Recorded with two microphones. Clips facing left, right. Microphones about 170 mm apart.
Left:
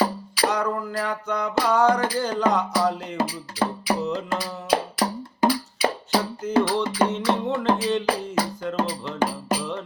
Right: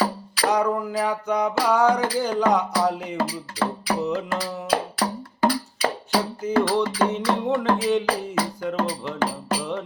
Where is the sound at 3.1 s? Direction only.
20° left (ahead or behind).